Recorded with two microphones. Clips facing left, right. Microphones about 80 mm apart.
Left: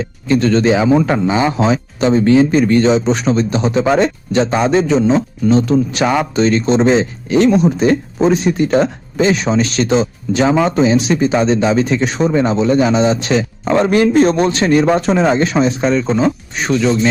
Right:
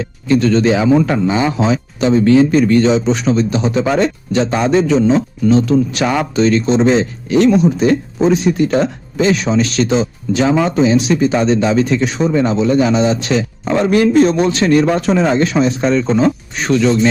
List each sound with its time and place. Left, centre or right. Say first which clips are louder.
0.3 s speech: right 1 dB; left
0.6 s speech: even; left
1.5 s speech: left 1 dB; left
5.0 s speech: right 1 dB; left
6.8 s speech: even; left
12.8 s speech: even; left
14.7 s speech: left 1 dB; left
15.8 s speech: right 1 dB; centre